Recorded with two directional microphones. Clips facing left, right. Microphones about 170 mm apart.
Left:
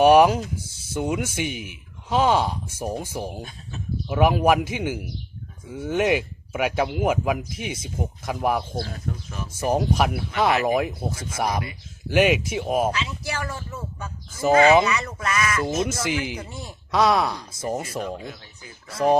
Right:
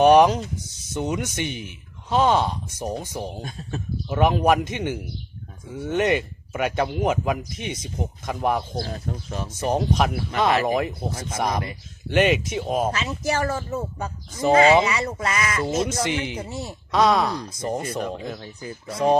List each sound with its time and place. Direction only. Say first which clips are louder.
0.0 s speech: even; 10° left (ahead or behind)
8.8 s speech: right 1 dB; 30° right (ahead or behind)
9.5 s speech: left 1 dB; 10° left (ahead or behind)
12.9 s speech: right 4 dB; 40° right (ahead or behind); by 15.6 s 25° right (ahead or behind)
16.0 s speech: even; 10° left (ahead or behind)
16.4 s speech: right 5 dB; 25° right (ahead or behind)
16.6 s speech: right 1 dB; 5° left (ahead or behind)
18.0 s speech: right 2 dB; 45° right (ahead or behind)